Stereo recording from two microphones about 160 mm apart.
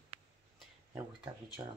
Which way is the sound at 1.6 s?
15° right (ahead or behind).